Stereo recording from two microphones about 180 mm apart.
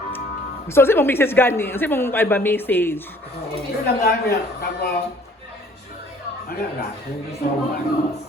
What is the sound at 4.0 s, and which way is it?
Speech, 60° left (ahead or behind).